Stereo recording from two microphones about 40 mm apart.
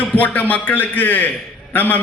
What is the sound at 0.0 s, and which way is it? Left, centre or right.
A man's voice, left.